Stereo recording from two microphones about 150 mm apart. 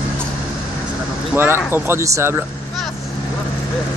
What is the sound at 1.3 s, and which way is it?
Speech, 15° right (ahead or behind).